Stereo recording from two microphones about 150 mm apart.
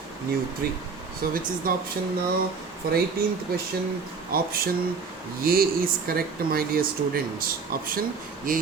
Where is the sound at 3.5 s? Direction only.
90° right.